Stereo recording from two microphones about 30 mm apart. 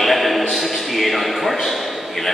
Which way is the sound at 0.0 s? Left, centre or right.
Centre.